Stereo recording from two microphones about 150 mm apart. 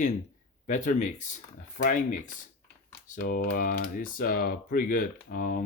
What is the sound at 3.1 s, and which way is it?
Speech, 70° left (ahead or behind).